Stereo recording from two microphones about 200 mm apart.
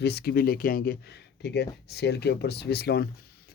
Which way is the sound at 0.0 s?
55° left (ahead or behind).